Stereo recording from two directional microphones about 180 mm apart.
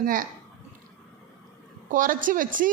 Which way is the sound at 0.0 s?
50° right (ahead or behind).